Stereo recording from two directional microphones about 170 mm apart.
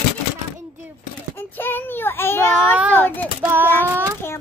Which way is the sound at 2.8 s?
10° right (ahead or behind).